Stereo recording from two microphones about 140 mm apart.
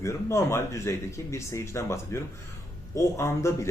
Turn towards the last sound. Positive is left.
turn(degrees=20)  # may be behind; listen again after turning